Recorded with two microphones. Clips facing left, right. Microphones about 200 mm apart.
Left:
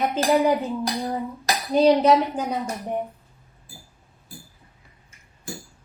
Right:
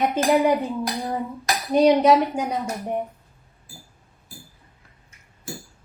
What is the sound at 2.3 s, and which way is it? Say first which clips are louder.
Speech: right 1 dB; 10° right (ahead or behind).